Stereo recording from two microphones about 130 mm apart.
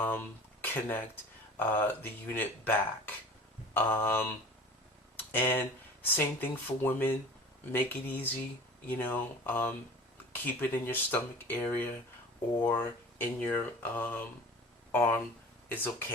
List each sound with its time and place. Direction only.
0.0 s speech: 15° left (ahead or behind)
3.8 s speech: 15° left (ahead or behind)
5.1 s a sound: 15° left (ahead or behind)
6.1 s speech: 15° left (ahead or behind)